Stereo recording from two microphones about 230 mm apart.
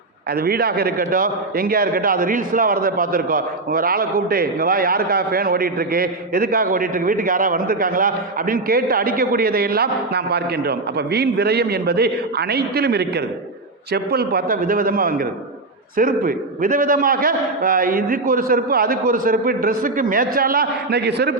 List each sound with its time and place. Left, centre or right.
0.3 s a man's voice: right